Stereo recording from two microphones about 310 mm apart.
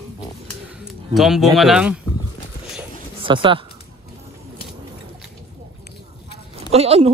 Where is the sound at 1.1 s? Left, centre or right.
Centre.